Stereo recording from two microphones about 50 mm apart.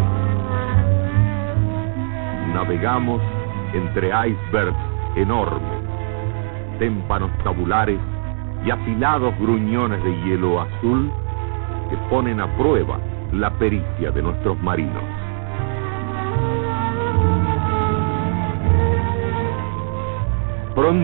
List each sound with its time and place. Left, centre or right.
0.0 s music: left
3.7 s speech: left
6.8 s speech: left
15.6 s music: left
20.7 s speech: left